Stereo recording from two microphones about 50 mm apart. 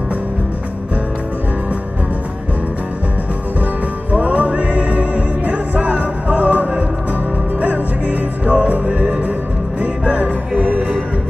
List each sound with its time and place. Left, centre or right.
4.1 s music: right
8.5 s music: right